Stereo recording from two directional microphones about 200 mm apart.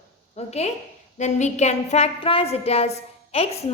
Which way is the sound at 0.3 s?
30° left (ahead or behind).